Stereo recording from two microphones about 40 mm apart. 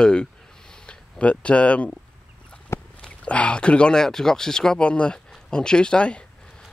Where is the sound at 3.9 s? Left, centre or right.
Centre.